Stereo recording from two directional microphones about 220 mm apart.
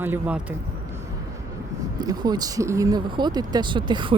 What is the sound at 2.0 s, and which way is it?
Speech, 20° right (ahead or behind).